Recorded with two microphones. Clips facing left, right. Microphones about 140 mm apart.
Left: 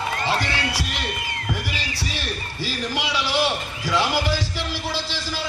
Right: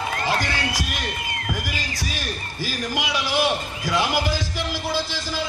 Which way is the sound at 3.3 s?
15° right (ahead or behind).